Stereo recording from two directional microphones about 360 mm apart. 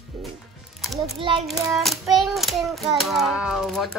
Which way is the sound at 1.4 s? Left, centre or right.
Centre.